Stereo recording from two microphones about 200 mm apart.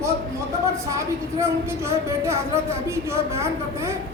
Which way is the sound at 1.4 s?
15° right (ahead or behind).